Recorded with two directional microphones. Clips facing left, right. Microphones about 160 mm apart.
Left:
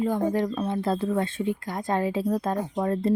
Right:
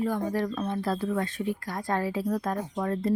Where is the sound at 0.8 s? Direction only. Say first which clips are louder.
Left 3 dB; 25° left (ahead or behind).